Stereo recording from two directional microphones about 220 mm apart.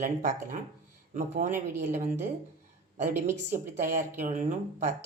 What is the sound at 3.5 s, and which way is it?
Speech, 35° right (ahead or behind).